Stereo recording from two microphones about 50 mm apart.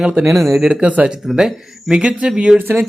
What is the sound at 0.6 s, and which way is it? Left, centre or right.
Speech, centre.